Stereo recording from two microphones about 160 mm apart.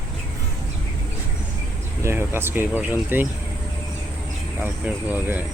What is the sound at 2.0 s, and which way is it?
Speech, 15° right (ahead or behind).